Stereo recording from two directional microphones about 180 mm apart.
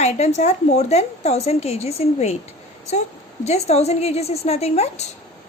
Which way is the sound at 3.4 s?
35° left (ahead or behind).